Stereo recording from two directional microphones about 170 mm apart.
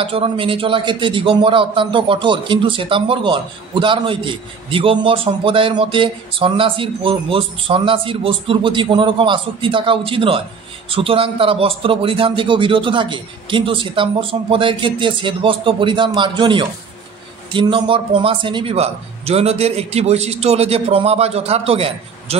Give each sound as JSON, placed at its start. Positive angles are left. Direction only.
{"t": 0.0, "sound": "a man's voice", "side_deg": -30}